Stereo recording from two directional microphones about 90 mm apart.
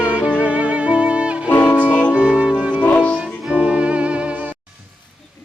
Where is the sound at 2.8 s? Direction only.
15° left (ahead or behind).